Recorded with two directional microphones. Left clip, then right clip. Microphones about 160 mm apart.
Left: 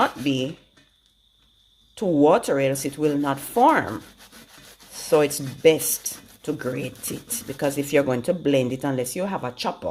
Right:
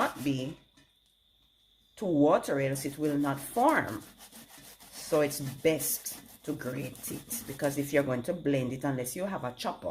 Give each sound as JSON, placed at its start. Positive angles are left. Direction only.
{"t": 0.0, "sound": "a sound", "side_deg": 45}
{"t": 2.0, "sound": "speech", "side_deg": 45}
{"t": 5.0, "sound": "speech", "side_deg": 45}